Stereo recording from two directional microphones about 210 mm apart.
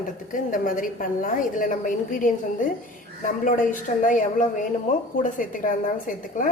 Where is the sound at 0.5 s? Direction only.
40° left (ahead or behind).